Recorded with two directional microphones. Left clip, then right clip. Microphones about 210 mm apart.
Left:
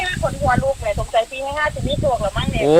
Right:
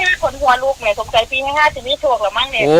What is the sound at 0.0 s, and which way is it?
Speech, 25° right (ahead or behind).